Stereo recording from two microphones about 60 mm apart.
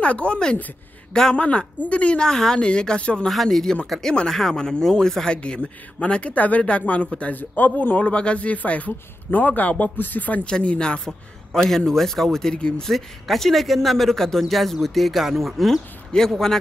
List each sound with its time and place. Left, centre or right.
0.0 s a man's voice: centre
2.2 s speech: centre
3.3 s speech: centre
4.1 s a man's voice: centre
11.1 s speech: centre
12.8 s speech: centre